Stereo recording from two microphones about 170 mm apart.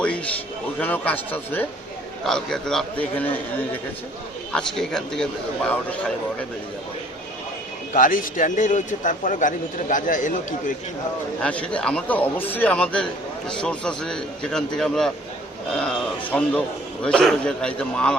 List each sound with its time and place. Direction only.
0.8 s a man's voice: 10° left (ahead or behind)
4.5 s a man's voice: 5° left (ahead or behind)
7.9 s a man's voice: 55° left (ahead or behind)
11.3 s a man's voice: 5° left (ahead or behind)